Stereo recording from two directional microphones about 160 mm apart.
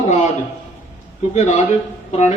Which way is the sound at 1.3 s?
45° left (ahead or behind).